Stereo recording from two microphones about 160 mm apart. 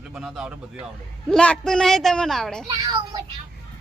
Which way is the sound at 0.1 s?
5° right (ahead or behind).